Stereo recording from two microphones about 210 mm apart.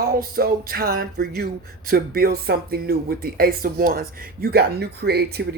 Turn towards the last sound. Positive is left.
turn(degrees=-50)  # may be behind; listen again after turning